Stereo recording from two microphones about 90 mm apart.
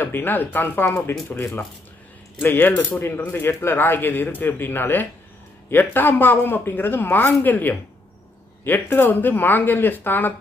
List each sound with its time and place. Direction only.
0.0 s speech: 20° left (ahead or behind)